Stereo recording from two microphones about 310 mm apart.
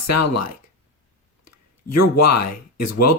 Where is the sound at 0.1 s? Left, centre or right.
Left.